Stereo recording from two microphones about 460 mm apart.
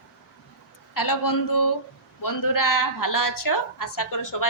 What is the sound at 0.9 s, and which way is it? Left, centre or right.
A woman's voice, left.